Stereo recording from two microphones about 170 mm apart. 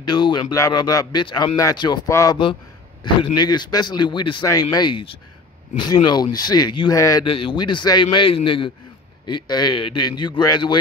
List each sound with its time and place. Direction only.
0.0 s a man's voice: 25° left (ahead or behind)
6.3 s a man's voice: 25° left (ahead or behind)
7.2 s a man's voice: 30° left (ahead or behind)